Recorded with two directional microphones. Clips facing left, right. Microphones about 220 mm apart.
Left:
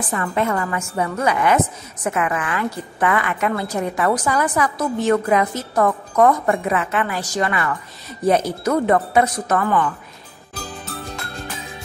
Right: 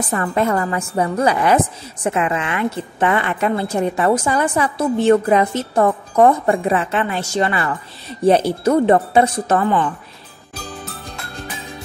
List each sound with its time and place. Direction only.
0.1 s a woman's voice: 40° right (ahead or behind)